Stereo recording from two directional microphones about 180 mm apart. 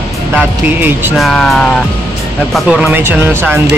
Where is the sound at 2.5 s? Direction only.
5° right (ahead or behind).